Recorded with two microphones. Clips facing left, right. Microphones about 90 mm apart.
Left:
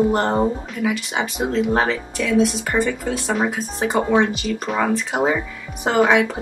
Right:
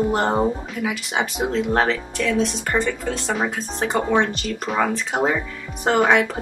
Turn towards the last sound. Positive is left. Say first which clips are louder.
# left 1 dB
turn(degrees=0)  # may be behind; listen again after turning